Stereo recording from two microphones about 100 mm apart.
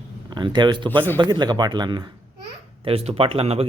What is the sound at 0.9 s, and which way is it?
Speech, 20° left (ahead or behind).